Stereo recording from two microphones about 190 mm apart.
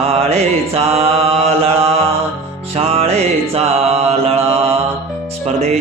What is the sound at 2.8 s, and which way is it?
Music, 30° right (ahead or behind).